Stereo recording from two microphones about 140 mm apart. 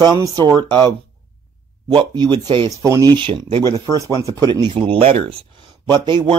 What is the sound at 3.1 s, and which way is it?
Speech, 40° right (ahead or behind).